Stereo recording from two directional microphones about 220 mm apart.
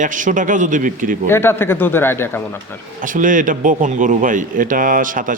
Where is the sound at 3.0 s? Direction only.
35° right (ahead or behind).